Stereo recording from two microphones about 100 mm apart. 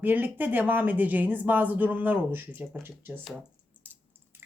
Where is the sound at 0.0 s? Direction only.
20° right (ahead or behind).